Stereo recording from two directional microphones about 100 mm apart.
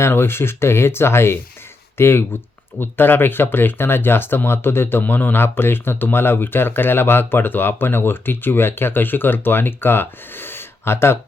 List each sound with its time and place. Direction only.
0.0 s speech: 25° left (ahead or behind)